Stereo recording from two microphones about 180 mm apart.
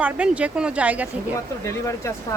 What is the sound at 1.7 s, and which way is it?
Speech, 15° left (ahead or behind).